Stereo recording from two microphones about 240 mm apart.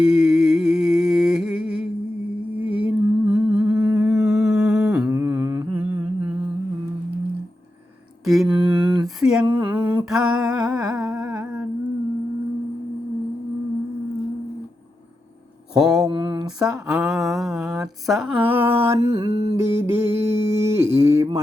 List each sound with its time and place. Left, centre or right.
0.0 s a sound: centre
2.6 s humming: centre
8.2 s mantra: centre
9.5 s a sound: centre
9.8 s humming: centre
15.7 s mantra: centre
16.0 s a sound: centre
16.9 s mantra: centre
18.0 s speech: centre